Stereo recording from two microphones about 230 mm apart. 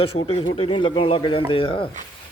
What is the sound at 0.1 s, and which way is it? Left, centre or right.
Speech, left.